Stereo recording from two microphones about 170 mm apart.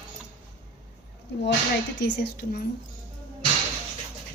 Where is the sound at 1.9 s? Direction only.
80° left.